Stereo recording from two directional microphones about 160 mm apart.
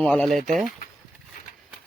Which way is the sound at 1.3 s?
60° left (ahead or behind).